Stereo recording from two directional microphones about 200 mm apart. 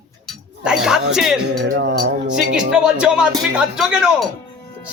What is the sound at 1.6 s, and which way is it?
Music, 65° right (ahead or behind).